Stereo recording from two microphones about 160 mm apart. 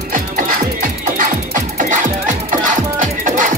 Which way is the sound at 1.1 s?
55° right (ahead or behind).